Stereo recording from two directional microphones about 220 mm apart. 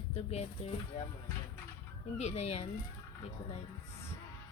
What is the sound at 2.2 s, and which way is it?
Speech, 30° left (ahead or behind).